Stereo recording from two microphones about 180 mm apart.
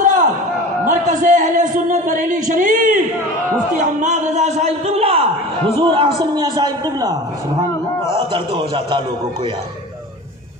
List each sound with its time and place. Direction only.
0.0 s a sound: 45° right (ahead or behind)
0.8 s a man's voice: 40° right (ahead or behind); by 7.2 s 20° right (ahead or behind)
8.3 s a man's voice: 30° right (ahead or behind)